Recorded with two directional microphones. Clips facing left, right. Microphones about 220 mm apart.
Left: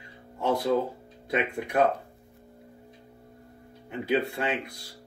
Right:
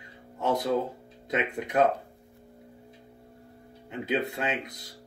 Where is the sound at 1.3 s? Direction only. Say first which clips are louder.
Left 1 dB; 20° right (ahead or behind).